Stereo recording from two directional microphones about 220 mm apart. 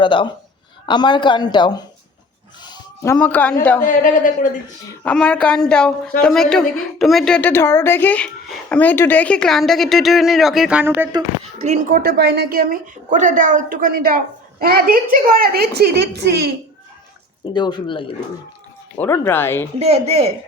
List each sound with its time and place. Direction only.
0.0 s speech: 20° left (ahead or behind)
3.8 s a man's voice: 40° left (ahead or behind)
4.9 s a woman's voice: 5° left (ahead or behind); by 11.2 s 10° right (ahead or behind)
11.6 s a woman's voice: 35° right (ahead or behind)
17.4 s speech: 20° left (ahead or behind)
18.9 s speech: 10° left (ahead or behind)
19.8 s speech: 30° right (ahead or behind)